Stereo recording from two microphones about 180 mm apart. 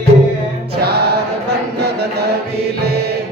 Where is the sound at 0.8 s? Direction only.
65° right (ahead or behind).